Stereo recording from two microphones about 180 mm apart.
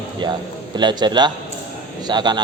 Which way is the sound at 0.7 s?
25° right (ahead or behind).